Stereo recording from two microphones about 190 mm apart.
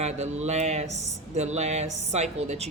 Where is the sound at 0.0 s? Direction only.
35° right (ahead or behind).